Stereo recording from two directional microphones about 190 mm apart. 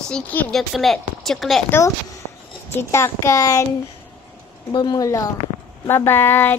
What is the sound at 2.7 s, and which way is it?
Speech, 15° left (ahead or behind).